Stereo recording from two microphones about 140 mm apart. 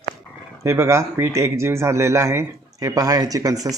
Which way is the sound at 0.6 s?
20° right (ahead or behind).